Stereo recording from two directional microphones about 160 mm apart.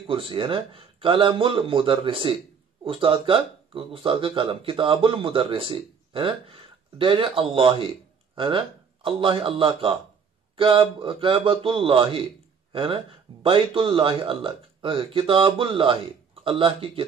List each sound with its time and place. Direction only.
0.0 s speech: 35° right (ahead or behind)